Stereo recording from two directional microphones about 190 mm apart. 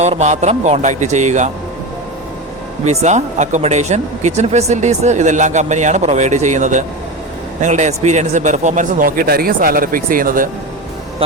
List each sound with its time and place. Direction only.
0.0 s speech: 35° right (ahead or behind)
2.8 s a man's voice: 35° right (ahead or behind)